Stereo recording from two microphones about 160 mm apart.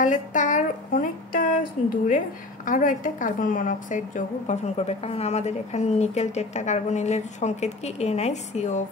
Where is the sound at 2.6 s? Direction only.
55° left (ahead or behind).